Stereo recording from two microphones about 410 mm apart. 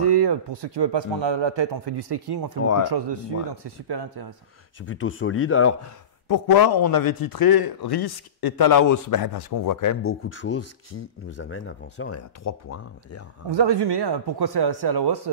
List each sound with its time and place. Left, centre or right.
0.0 s speech: right
3.6 s speech: right
4.8 s speech: left
6.2 s a man's voice: left
10.0 s speech: left
13.5 s speech: right